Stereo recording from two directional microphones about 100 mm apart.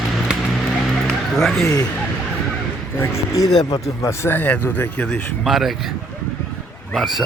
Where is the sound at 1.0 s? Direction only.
5° left (ahead or behind).